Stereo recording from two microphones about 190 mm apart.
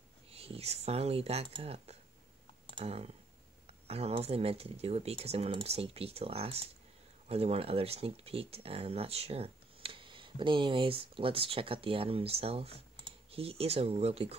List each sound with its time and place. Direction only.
0.3 s speech: 30° right (ahead or behind)